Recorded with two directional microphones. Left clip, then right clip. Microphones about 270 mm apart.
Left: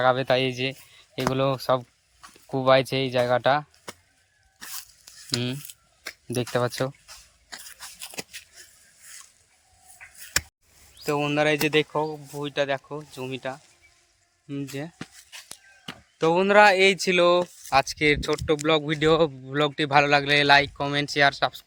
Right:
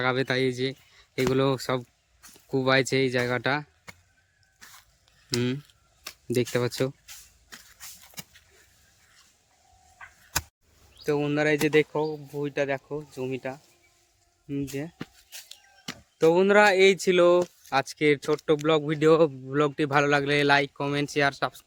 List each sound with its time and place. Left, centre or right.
0.0 s a man's voice: centre
6.5 s a man's voice: centre
10.9 s a man's voice: centre
15.4 s a sound: centre
17.7 s a man's voice: centre